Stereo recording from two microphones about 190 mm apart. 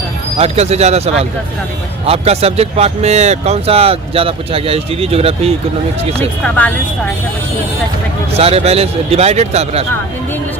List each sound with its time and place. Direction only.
0.3 s speech: 30° right (ahead or behind)
6.4 s speech: 10° left (ahead or behind)
8.3 s speech: 30° right (ahead or behind)